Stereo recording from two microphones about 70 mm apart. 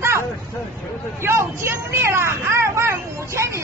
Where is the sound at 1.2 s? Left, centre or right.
Right.